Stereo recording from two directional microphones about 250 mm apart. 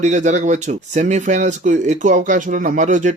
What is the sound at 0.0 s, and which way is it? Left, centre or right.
Speech, right.